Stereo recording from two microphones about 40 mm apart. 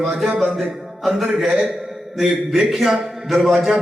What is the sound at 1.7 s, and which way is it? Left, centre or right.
A man's voice, centre.